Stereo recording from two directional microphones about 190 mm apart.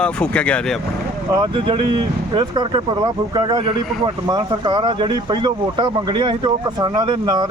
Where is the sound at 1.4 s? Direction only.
25° right (ahead or behind).